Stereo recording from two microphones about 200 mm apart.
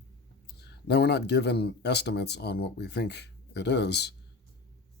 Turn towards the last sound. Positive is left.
turn(degrees=55)  # may be behind; listen again after turning